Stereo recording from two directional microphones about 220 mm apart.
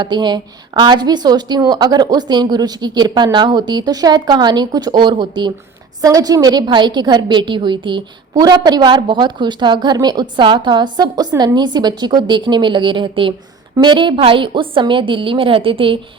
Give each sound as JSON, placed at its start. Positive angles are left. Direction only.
{"t": 0.0, "sound": "a woman's voice", "side_deg": -20}